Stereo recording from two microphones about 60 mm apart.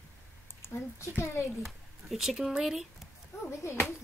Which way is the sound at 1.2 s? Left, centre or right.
Left.